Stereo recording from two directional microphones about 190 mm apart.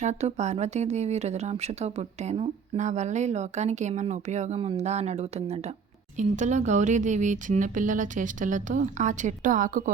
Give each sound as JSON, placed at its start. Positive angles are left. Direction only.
{"t": 0.0, "sound": "speech", "side_deg": -35}